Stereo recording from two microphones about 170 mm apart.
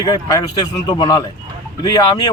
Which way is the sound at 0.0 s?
20° left (ahead or behind).